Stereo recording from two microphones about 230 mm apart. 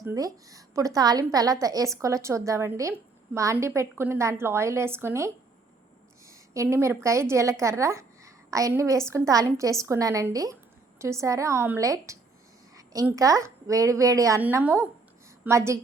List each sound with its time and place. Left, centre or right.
0.0 s a woman's voice: centre
6.5 s a woman's voice: centre